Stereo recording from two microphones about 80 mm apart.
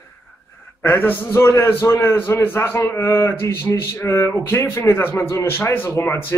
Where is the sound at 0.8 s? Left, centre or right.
Left.